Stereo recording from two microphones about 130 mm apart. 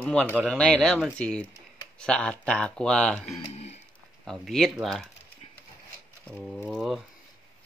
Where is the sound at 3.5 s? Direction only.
55° left (ahead or behind).